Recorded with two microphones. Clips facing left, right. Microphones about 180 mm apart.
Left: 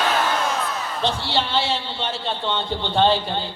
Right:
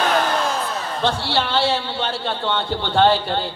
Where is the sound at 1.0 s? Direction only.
60° right (ahead or behind).